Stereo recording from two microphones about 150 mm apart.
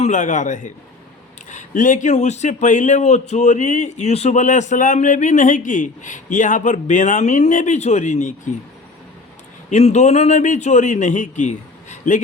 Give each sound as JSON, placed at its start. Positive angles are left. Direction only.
{"t": 0.0, "sound": "speech", "side_deg": 55}
{"t": 9.6, "sound": "speech", "side_deg": 50}